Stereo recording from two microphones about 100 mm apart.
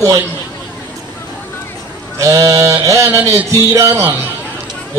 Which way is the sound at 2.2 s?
35° right (ahead or behind).